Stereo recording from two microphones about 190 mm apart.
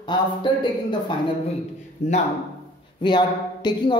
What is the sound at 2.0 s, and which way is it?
Speech, 40° left (ahead or behind).